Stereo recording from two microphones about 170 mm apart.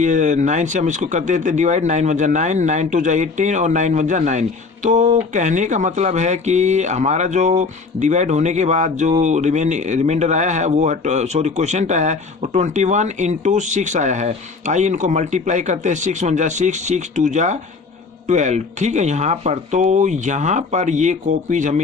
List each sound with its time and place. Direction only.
0.0 s speech: 45° right (ahead or behind)